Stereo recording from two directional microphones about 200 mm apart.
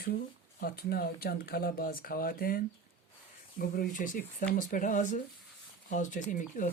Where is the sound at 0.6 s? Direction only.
50° left (ahead or behind).